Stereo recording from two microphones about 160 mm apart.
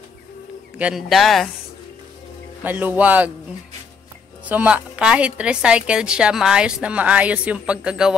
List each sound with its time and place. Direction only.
0.7 s speech: 5° right (ahead or behind)
2.6 s a woman's voice: 10° right (ahead or behind)
4.5 s a woman's voice: 10° right (ahead or behind)